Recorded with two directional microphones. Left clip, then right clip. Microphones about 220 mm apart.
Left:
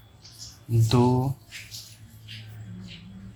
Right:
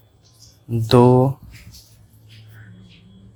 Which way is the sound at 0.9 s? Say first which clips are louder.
Right 11 dB; 45° right (ahead or behind).